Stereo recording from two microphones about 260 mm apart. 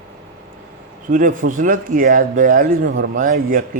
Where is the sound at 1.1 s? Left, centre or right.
Right.